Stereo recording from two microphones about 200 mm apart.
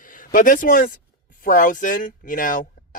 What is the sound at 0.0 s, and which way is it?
Speech, 40° left (ahead or behind).